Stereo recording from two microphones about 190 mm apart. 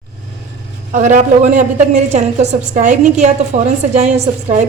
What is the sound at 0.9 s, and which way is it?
A woman's voice, 40° right (ahead or behind).